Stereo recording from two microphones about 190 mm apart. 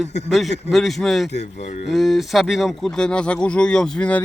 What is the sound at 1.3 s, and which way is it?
Speech, 35° left (ahead or behind).